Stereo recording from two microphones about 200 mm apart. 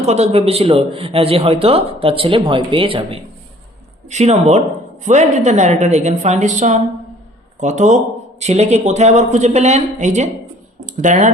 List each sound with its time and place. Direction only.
0.0 s speech: 35° right (ahead or behind)